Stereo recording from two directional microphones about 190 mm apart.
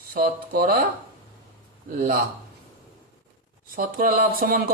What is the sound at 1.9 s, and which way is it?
Speech, 50° right (ahead or behind).